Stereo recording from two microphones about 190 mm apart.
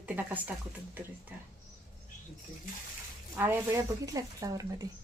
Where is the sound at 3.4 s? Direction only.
15° right (ahead or behind).